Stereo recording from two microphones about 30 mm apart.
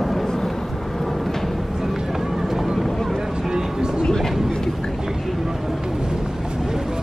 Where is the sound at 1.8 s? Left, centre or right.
Centre.